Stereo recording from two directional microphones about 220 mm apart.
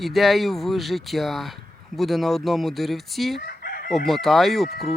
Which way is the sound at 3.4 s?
40° left (ahead or behind).